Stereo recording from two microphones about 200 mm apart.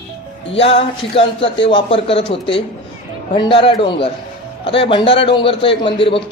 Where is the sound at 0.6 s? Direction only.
30° left (ahead or behind).